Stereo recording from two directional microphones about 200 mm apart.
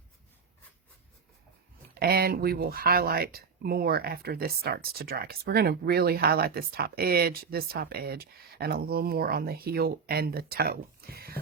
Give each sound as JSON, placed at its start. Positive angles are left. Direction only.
{"t": 2.0, "sound": "speech", "side_deg": -50}